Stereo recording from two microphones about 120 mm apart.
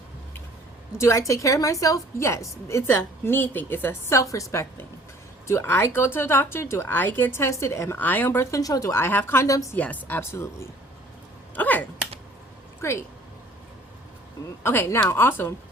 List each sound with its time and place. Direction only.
0.9 s speech: 25° left (ahead or behind)
9.7 s speech: 15° left (ahead or behind)
11.5 s a sound: 15° left (ahead or behind)
12.8 s a woman's voice: 25° left (ahead or behind)
14.6 s speech: 20° left (ahead or behind)